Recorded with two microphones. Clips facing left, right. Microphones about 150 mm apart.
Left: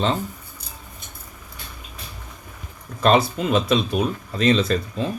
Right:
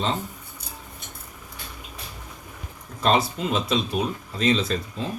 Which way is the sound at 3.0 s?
65° left (ahead or behind).